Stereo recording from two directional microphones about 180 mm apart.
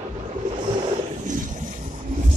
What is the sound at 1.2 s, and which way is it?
Boat, 45° right (ahead or behind).